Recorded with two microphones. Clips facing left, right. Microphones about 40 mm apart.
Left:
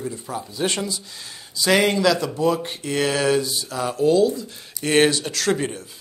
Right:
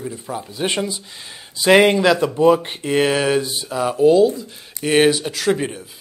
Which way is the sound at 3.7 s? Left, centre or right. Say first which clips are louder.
Right 5 dB; centre.